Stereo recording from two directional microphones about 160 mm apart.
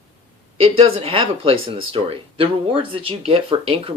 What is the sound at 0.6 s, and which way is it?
Speech, 35° right (ahead or behind).